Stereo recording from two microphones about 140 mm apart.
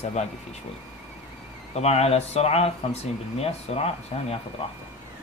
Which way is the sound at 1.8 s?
50° left (ahead or behind).